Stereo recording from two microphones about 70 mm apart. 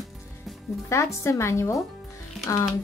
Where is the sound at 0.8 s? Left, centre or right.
Left.